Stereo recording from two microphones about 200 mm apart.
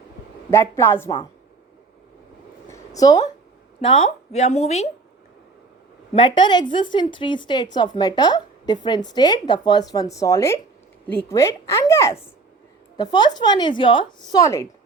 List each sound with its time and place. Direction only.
0.5 s a woman's voice: 15° left (ahead or behind)
2.6 s a sound: 15° left (ahead or behind)
3.8 s speech: 30° left (ahead or behind)
6.1 s a woman's voice: 25° left (ahead or behind)